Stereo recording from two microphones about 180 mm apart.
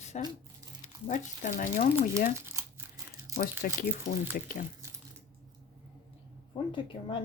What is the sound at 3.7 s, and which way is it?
Speech, 50° left (ahead or behind).